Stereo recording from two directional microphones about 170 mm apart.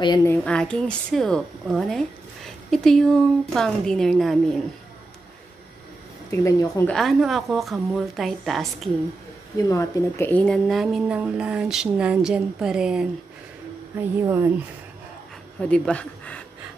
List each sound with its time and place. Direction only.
0.0 s speech: 25° left (ahead or behind)
0.3 s a woman's voice: 5° left (ahead or behind)
6.4 s speech: 20° left (ahead or behind)
6.9 s a woman's voice: centre (ahead or behind)
9.7 s a woman's voice: 15° left (ahead or behind); by 13.1 s 5° right (ahead or behind)
13.9 s speech: 15° right (ahead or behind)
15.6 s speech: 5° left (ahead or behind)